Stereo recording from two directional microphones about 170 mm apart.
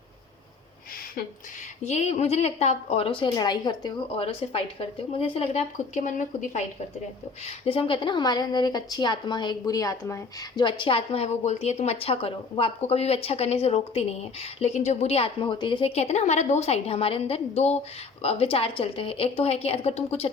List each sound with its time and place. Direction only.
1.8 s a woman's voice: 40° left (ahead or behind)
7.4 s a woman's voice: 35° left (ahead or behind)